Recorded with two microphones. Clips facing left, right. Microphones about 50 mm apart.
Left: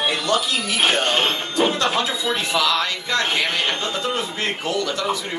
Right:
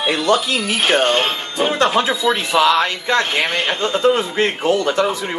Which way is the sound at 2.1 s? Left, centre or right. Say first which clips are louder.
Right 5 dB; right.